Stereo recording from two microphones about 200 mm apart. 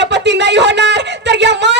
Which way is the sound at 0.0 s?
60° right (ahead or behind).